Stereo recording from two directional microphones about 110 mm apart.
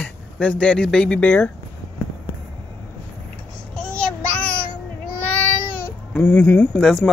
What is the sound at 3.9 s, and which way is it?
Child singing, 10° left (ahead or behind).